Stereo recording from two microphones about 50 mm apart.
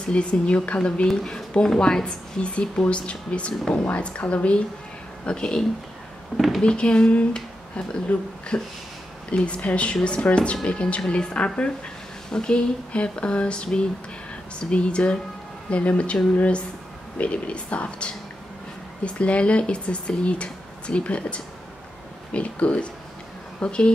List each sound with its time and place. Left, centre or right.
0.1 s speech: left
6.3 s speech: centre
6.6 s speech: centre